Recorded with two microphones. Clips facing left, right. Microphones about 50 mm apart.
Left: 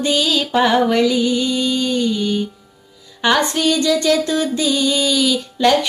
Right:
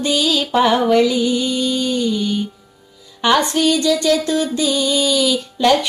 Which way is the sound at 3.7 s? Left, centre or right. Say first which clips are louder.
Left 1 dB; centre.